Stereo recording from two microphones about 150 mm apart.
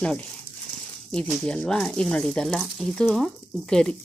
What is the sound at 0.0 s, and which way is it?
Speech, 5° left (ahead or behind).